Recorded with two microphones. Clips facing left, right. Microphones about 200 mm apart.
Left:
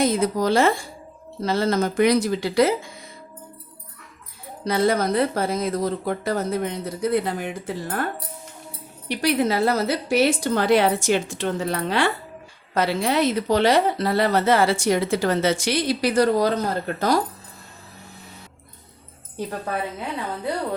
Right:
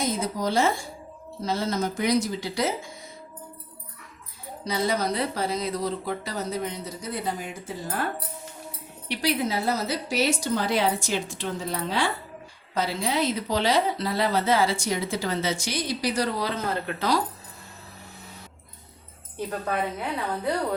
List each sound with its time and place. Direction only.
0.0 s speech: 60° left (ahead or behind)
4.6 s speech: 55° left (ahead or behind)
9.0 s speech: 60° left (ahead or behind); by 17.2 s 45° left (ahead or behind)